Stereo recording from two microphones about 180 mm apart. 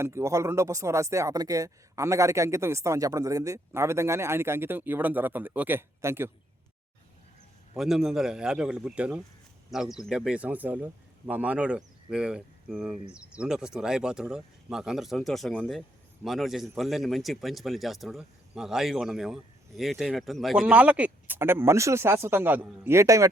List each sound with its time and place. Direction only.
0.0 s speech: 15° right (ahead or behind)
7.8 s speech: centre (ahead or behind)